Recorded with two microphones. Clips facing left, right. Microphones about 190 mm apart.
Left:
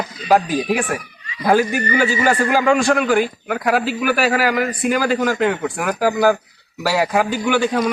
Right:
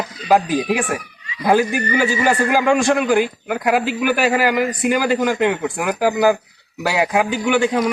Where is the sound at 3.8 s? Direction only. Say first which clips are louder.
Even; 15° right (ahead or behind).